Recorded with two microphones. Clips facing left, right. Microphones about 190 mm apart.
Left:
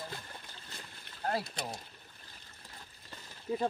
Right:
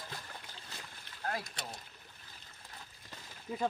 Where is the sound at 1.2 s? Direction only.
35° left (ahead or behind).